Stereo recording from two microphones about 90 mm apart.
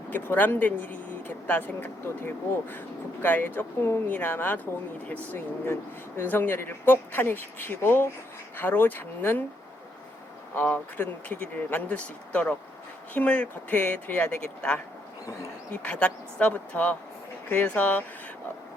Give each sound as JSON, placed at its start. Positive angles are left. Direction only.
{"t": 0.1, "sound": "speech", "side_deg": 20}
{"t": 6.1, "sound": "speech", "side_deg": 20}
{"t": 10.5, "sound": "speech", "side_deg": 20}